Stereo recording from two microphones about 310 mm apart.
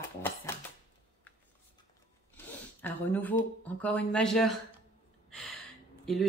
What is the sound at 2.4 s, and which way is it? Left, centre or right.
Speech, centre.